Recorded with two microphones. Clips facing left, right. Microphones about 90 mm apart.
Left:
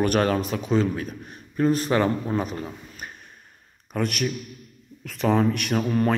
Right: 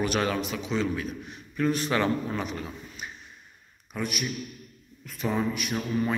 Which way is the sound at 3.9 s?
65° left (ahead or behind).